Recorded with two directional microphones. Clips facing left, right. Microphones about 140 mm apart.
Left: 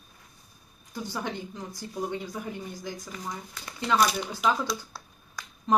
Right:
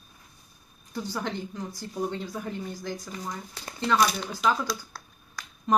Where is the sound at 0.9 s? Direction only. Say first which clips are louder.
Right 2 dB; 15° left (ahead or behind).